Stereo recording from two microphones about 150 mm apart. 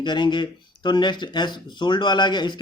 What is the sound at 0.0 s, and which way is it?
Speech, 30° left (ahead or behind).